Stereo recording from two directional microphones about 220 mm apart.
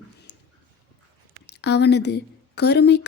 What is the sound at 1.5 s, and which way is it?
A woman's voice, 50° left (ahead or behind).